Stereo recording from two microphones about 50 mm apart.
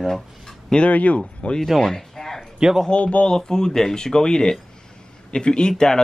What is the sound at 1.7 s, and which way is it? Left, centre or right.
Speech, centre.